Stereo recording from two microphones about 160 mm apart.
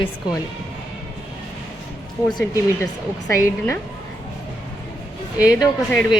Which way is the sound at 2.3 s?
20° left (ahead or behind).